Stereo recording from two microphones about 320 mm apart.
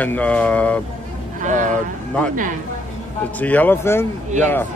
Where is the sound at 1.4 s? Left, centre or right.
Right.